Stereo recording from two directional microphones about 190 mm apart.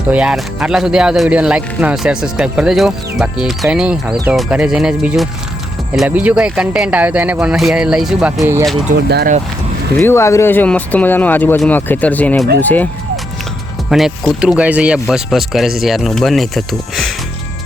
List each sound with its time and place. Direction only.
0.1 s speech: 5° right (ahead or behind)
8.4 s speech: 15° right (ahead or behind)
9.0 s speech: 60° right (ahead or behind)
10.0 s speech: 15° left (ahead or behind)
13.9 s speech: centre (ahead or behind)